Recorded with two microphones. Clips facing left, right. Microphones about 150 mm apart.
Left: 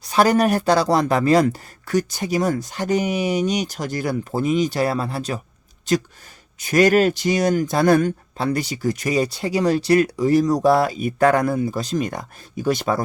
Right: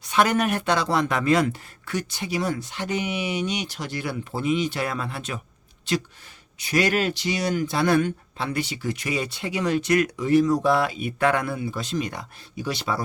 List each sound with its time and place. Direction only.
0.0 s speech: 35° left (ahead or behind)